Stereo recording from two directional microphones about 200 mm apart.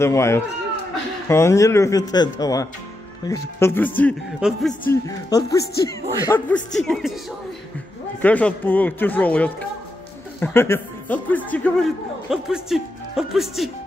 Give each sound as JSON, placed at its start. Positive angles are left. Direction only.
{"t": 0.0, "sound": "speech", "side_deg": 15}
{"t": 4.4, "sound": "speech", "side_deg": 0}
{"t": 4.8, "sound": "speech", "side_deg": 15}
{"t": 8.2, "sound": "speech", "side_deg": 5}